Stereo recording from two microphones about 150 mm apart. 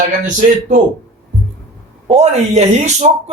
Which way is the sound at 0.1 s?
60° right (ahead or behind).